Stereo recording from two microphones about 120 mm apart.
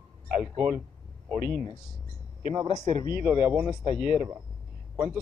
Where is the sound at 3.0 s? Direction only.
15° right (ahead or behind).